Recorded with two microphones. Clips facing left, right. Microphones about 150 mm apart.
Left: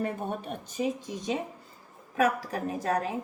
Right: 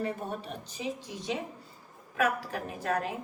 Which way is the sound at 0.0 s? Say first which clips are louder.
Left 2 dB; 50° left (ahead or behind).